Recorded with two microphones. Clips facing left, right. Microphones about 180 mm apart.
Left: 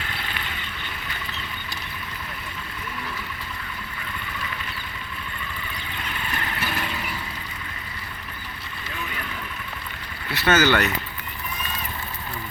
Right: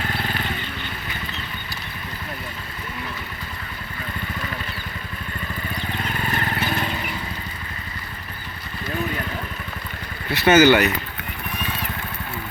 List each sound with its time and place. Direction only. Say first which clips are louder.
0.0 s vehicle: right 7 dB; 45° right (ahead or behind)
6.1 s vehicle: right 4 dB; 45° right (ahead or behind)
8.9 s vehicle: right 9 dB; 40° right (ahead or behind)
10.3 s speech: right 6 dB; 15° right (ahead or behind)